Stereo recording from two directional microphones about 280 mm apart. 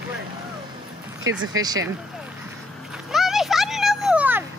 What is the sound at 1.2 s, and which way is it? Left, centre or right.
Speech, right.